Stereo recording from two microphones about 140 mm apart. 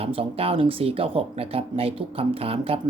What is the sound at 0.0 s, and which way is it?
Speech, 45° right (ahead or behind).